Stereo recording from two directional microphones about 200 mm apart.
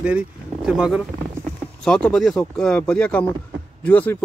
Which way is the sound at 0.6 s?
5° right (ahead or behind).